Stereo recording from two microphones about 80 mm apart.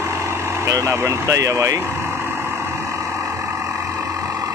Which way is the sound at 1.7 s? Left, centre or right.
Right.